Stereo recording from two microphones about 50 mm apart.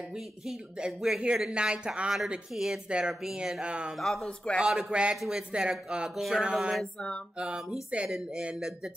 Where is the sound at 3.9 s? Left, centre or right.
Centre.